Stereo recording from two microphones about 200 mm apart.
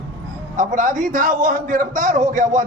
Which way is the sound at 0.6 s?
40° right (ahead or behind).